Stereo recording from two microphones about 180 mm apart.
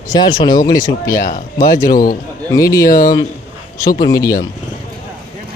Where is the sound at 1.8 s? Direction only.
50° left (ahead or behind).